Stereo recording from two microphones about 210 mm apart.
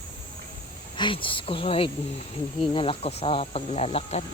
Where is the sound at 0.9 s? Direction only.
25° left (ahead or behind).